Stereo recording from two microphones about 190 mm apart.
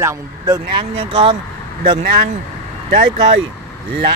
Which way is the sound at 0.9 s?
30° right (ahead or behind).